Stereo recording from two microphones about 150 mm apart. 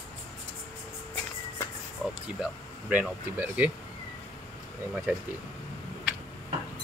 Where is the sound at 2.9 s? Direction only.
10° right (ahead or behind).